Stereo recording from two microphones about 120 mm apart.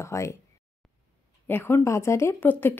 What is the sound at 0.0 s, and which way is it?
Speech, 25° left (ahead or behind).